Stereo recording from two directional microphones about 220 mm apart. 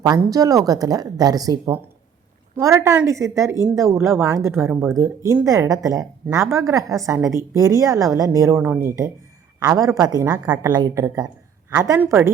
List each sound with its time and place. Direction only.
0.2 s speech: 15° right (ahead or behind)